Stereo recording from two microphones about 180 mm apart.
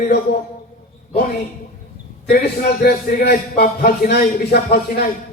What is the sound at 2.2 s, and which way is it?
A man's voice, 60° left (ahead or behind).